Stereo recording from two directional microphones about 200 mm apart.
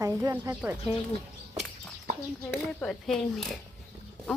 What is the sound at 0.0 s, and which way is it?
Speech, 15° right (ahead or behind).